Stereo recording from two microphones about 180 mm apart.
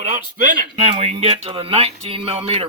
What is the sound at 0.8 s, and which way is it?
Speech, 35° right (ahead or behind).